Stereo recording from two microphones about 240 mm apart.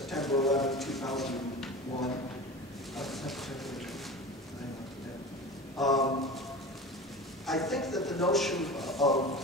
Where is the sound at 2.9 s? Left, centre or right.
Centre.